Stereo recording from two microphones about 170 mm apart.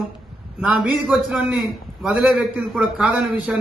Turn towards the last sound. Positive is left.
turn(degrees=-5)  # may be behind; listen again after turning